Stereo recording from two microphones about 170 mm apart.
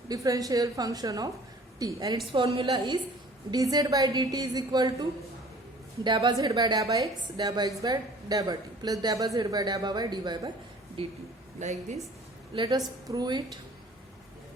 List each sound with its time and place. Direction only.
0.1 s a woman's voice: 20° right (ahead or behind)
2.3 s a woman's voice: 30° right (ahead or behind)
6.1 s a woman's voice: 25° right (ahead or behind); by 11.9 s 45° right (ahead or behind)
12.5 s a woman's voice: 25° right (ahead or behind)